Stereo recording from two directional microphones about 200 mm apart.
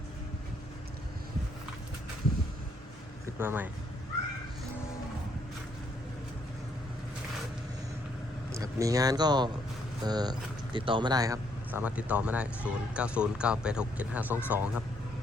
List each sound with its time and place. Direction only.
3.3 s speech: 10° right (ahead or behind)
8.5 s speech: 15° right (ahead or behind)